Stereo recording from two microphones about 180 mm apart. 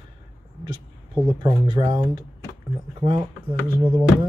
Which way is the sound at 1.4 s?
20° right (ahead or behind).